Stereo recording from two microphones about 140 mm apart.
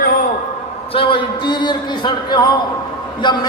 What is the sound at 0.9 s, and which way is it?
A man's voice, 40° left (ahead or behind).